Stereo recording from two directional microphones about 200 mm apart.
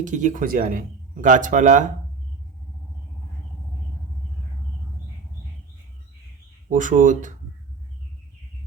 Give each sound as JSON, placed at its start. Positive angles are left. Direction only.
{"t": 0.0, "sound": "speech", "side_deg": -40}
{"t": 6.7, "sound": "speech", "side_deg": -40}